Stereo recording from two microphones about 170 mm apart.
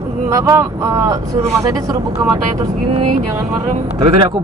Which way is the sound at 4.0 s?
30° right (ahead or behind).